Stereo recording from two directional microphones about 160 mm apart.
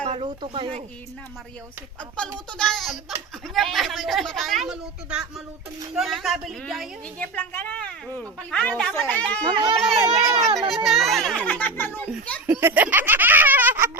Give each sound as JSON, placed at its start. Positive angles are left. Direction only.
{"t": 0.1, "sound": "speech", "side_deg": -35}
{"t": 2.0, "sound": "a woman's voice", "side_deg": 5}
{"t": 9.6, "sound": "speech", "side_deg": -25}
{"t": 10.8, "sound": "a woman's voice", "side_deg": 0}
{"t": 12.5, "sound": "snicker", "side_deg": -15}